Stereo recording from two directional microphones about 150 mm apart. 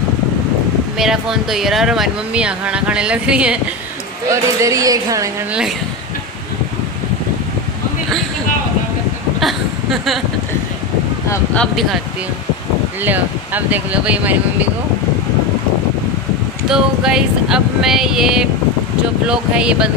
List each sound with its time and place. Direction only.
0.9 s speech: 5° right (ahead or behind)
4.3 s speech: 20° right (ahead or behind)
9.4 s speech: centre (ahead or behind)
11.5 s speech: 5° left (ahead or behind)
13.0 s speech: 10° right (ahead or behind)
16.6 s speech: 5° right (ahead or behind)